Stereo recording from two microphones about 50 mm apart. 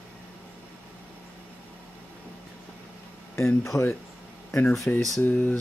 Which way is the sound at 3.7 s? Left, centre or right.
Centre.